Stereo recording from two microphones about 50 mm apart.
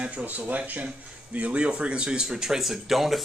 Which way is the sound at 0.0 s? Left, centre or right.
Right.